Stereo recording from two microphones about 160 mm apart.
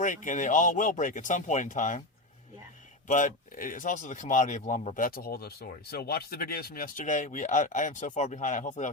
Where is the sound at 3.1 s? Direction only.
50° left (ahead or behind).